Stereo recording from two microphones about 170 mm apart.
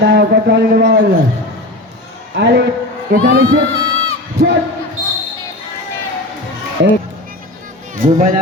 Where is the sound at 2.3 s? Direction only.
85° right.